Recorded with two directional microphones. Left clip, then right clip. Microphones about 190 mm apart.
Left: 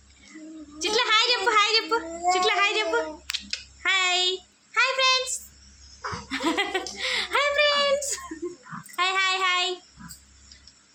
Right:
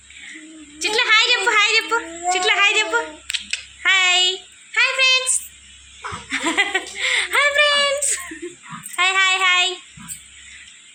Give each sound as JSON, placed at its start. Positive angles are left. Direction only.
{"t": 0.8, "sound": "a sound", "side_deg": 10}
{"t": 6.3, "sound": "chuckle", "side_deg": 5}
{"t": 9.0, "sound": "child singing", "side_deg": 0}